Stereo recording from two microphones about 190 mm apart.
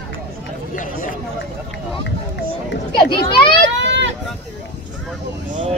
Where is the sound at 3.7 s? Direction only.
70° right (ahead or behind).